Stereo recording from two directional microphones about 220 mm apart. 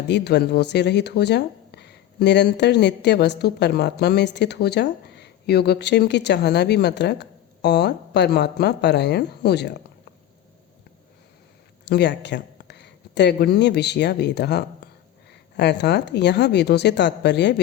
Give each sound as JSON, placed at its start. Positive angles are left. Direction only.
{"t": 0.1, "sound": "speech", "side_deg": 50}
{"t": 11.9, "sound": "speech", "side_deg": 50}
{"t": 14.8, "sound": "a sound", "side_deg": 50}
{"t": 15.5, "sound": "speech", "side_deg": 50}